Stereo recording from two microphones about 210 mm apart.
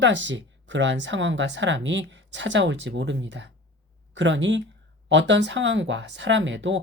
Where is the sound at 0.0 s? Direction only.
60° right (ahead or behind).